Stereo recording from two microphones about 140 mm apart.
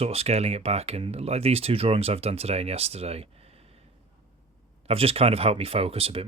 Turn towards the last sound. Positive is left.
turn(degrees=-45)  # may be behind; listen again after turning